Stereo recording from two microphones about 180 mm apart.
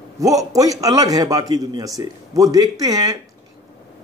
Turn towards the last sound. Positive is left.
turn(degrees=-20)  # may be behind; listen again after turning